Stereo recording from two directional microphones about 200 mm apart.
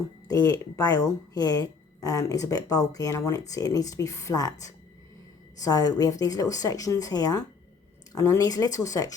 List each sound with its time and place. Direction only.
0.3 s speech: 20° left (ahead or behind)
5.5 s speech: 20° left (ahead or behind)